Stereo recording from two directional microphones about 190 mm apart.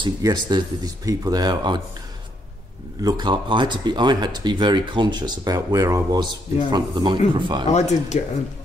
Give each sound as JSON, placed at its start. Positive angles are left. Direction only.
{"t": 0.0, "sound": "speech", "side_deg": -20}
{"t": 3.0, "sound": "speech", "side_deg": -20}
{"t": 7.6, "sound": "speech", "side_deg": 35}